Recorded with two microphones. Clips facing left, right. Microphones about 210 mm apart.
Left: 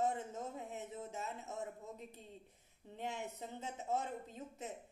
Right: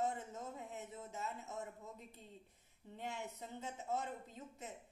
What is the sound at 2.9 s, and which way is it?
A woman's voice, 20° left (ahead or behind).